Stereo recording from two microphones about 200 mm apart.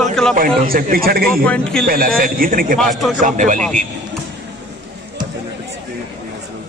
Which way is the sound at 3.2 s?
40° right (ahead or behind).